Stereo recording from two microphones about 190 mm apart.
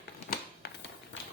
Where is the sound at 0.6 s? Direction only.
60° left (ahead or behind).